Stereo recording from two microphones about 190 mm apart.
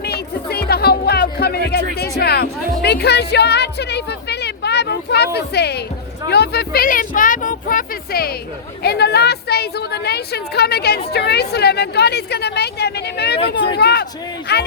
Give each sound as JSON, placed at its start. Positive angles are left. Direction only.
{"t": 0.0, "sound": "music", "side_deg": 55}
{"t": 6.3, "sound": "a woman's voice", "side_deg": 60}